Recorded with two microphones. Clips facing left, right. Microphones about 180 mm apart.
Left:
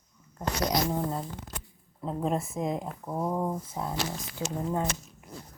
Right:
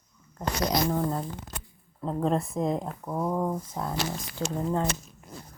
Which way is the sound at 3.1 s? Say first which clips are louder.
Right 2 dB; 20° left (ahead or behind).